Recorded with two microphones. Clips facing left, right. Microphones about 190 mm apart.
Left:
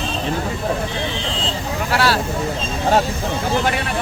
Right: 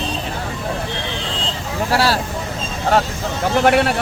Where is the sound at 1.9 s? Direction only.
35° right (ahead or behind).